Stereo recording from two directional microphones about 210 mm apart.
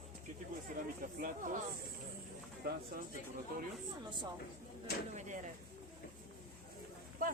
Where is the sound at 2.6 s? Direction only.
45° right (ahead or behind).